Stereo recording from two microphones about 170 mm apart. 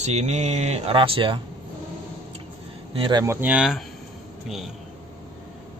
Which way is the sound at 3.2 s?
15° right (ahead or behind).